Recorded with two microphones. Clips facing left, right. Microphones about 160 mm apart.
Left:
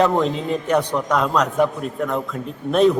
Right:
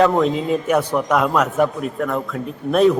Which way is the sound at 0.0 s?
5° right (ahead or behind).